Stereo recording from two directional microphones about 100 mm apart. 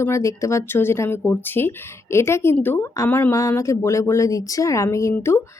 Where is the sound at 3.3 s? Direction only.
30° left (ahead or behind).